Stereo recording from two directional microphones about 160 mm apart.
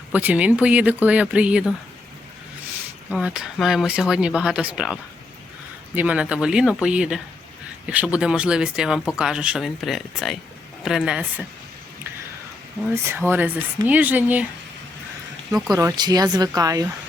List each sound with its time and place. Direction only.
0.1 s speech: 10° right (ahead or behind)
3.1 s speech: 5° right (ahead or behind)
12.9 s speech: 15° right (ahead or behind)
15.7 s speech: 20° right (ahead or behind)